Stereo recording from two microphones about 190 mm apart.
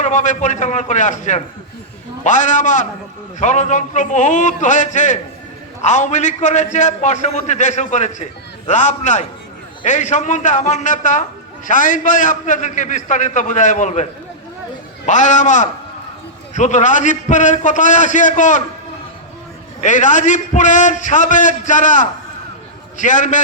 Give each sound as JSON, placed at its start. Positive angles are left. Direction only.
{"t": 0.0, "sound": "a man's voice", "side_deg": 40}
{"t": 19.8, "sound": "a man's voice", "side_deg": 40}